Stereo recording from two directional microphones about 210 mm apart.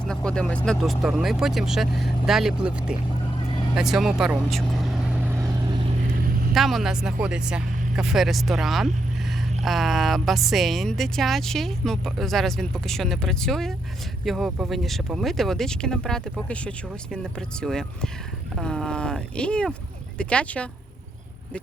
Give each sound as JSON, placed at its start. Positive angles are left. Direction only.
{"t": 0.0, "sound": "speech", "side_deg": 5}
{"t": 3.8, "sound": "vehicle", "side_deg": 0}
{"t": 6.5, "sound": "speech", "side_deg": 0}